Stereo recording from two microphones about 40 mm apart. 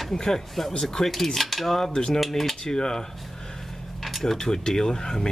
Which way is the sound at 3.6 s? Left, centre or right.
Centre.